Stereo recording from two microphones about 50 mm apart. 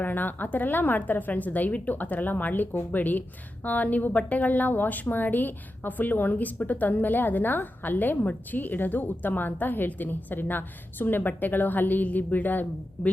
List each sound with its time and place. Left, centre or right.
0.0 s a woman's voice: left